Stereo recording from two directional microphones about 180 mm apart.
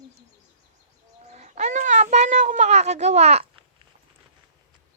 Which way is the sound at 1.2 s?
40° right (ahead or behind).